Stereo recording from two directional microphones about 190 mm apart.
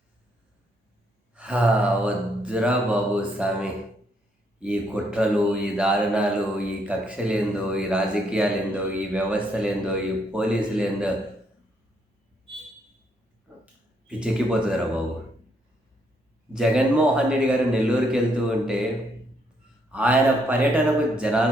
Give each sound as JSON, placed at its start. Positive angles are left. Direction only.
{"t": 1.3, "sound": "mantra", "side_deg": -5}
{"t": 4.6, "sound": "speech", "side_deg": -5}
{"t": 14.1, "sound": "speech", "side_deg": -5}
{"t": 16.5, "sound": "speech", "side_deg": -5}
{"t": 19.9, "sound": "mantra", "side_deg": -5}